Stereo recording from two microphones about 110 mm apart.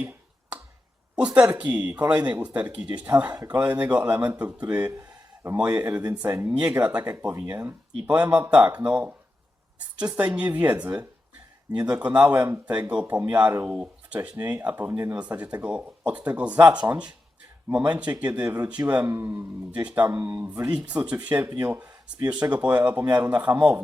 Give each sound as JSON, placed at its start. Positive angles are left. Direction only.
{"t": 1.1, "sound": "speech", "side_deg": -10}
{"t": 4.9, "sound": "a sound", "side_deg": -25}
{"t": 5.5, "sound": "speech", "side_deg": -15}